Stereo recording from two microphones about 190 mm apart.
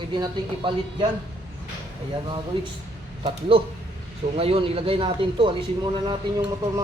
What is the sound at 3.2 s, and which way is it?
Speech, 30° right (ahead or behind).